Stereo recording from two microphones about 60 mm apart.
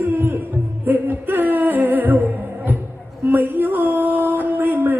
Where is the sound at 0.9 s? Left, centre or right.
Right.